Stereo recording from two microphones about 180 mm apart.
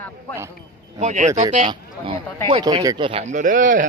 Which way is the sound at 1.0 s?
40° right (ahead or behind).